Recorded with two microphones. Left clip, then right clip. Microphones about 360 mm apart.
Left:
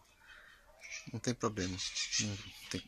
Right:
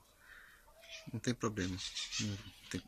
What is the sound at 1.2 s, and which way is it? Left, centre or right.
Speech, centre.